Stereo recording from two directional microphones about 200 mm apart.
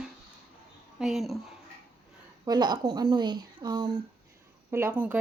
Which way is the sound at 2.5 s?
20° right (ahead or behind).